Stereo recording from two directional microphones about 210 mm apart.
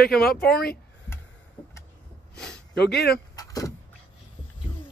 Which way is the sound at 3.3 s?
15° left (ahead or behind).